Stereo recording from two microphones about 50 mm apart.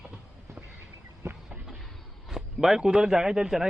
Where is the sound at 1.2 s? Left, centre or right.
Right.